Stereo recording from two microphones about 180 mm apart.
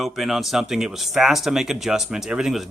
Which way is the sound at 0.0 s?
Centre (ahead or behind).